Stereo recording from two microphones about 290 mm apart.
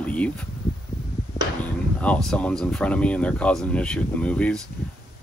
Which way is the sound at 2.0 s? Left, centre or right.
Centre.